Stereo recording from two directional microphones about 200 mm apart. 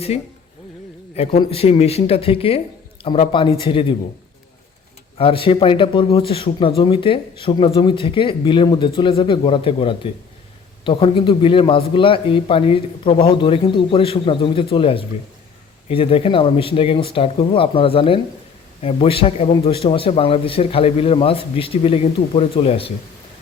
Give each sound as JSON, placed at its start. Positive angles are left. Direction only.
{"t": 1.1, "sound": "speech", "side_deg": 30}
{"t": 5.1, "sound": "speech", "side_deg": 25}